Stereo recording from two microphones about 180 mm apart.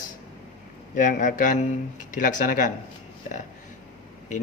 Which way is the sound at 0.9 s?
45° left (ahead or behind).